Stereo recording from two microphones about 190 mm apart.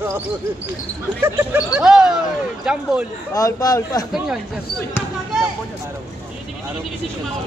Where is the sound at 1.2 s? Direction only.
5° right (ahead or behind).